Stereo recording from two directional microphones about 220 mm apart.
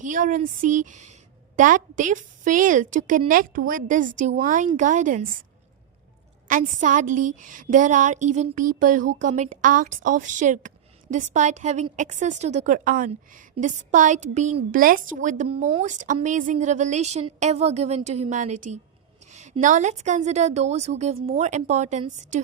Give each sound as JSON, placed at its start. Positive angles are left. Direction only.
{"t": 0.0, "sound": "a woman's voice", "side_deg": -35}
{"t": 6.5, "sound": "a woman's voice", "side_deg": -35}